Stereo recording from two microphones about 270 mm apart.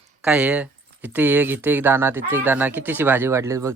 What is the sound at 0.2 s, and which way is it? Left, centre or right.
Speech, centre.